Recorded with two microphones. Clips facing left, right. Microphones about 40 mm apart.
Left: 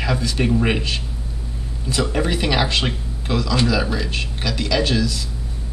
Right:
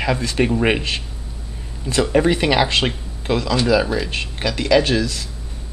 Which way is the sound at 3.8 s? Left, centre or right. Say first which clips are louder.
Right 2 dB; centre.